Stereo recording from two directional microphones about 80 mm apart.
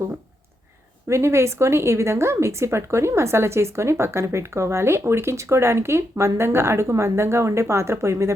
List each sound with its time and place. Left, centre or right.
1.0 s speech: right